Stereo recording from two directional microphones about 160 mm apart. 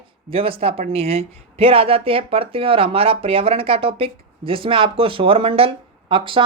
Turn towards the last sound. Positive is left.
turn(degrees=-30)  # may be behind; listen again after turning